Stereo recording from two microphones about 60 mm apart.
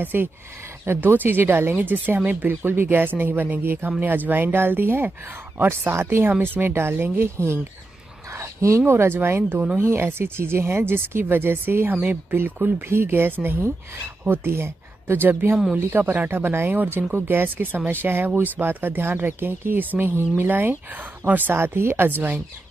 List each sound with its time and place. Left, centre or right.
0.0 s speech: right
8.3 s speech: right
21.5 s speech: right